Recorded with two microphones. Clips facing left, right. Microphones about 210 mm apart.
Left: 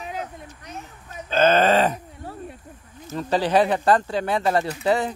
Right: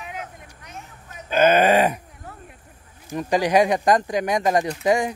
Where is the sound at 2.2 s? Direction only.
30° left (ahead or behind).